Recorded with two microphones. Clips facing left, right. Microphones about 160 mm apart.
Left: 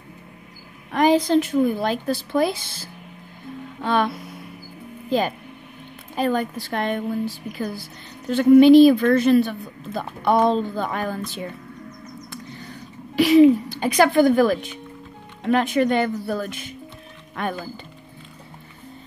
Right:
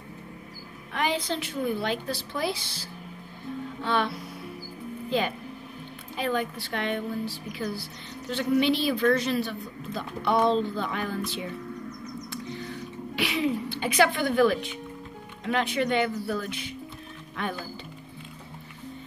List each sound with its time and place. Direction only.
0.9 s a woman's voice: 40° left (ahead or behind)
6.1 s a woman's voice: 45° left (ahead or behind)
13.1 s a woman's voice: 40° left (ahead or behind)